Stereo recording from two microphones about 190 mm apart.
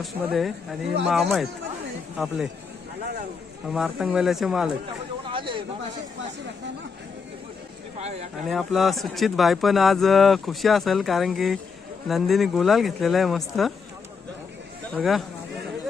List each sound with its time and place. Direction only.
0.0 s speech: centre (ahead or behind)
3.7 s speech: 5° right (ahead or behind)
5.3 s speech: 25° right (ahead or behind)
8.4 s speech: centre (ahead or behind)
14.9 s speech: centre (ahead or behind)